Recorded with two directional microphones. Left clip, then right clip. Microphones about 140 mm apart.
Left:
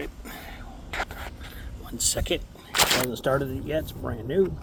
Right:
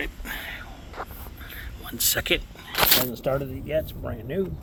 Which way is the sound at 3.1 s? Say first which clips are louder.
Left 1 dB; 25° left (ahead or behind).